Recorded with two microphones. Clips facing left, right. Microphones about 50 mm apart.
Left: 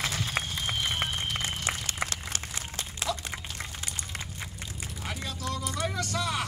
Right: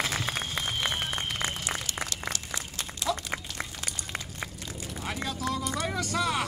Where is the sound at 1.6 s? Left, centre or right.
Left.